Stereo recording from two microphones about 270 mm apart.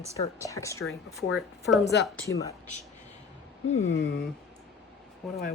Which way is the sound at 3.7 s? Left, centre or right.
Left.